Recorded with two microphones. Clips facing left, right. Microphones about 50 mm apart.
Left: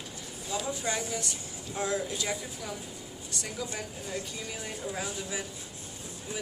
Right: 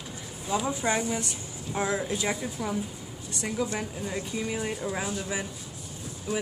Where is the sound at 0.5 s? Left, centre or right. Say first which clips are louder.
Right 6 dB; right.